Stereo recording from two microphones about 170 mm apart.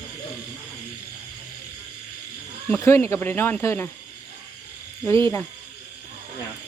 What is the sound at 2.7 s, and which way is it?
Speech, 15° left (ahead or behind).